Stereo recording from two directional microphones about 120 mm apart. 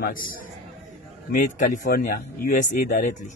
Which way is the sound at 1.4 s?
90° left.